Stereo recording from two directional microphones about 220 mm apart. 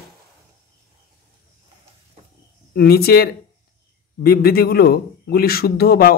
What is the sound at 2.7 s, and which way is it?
Speech, 45° left (ahead or behind).